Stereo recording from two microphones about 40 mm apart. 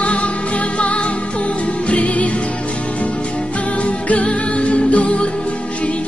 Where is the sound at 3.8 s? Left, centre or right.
Left.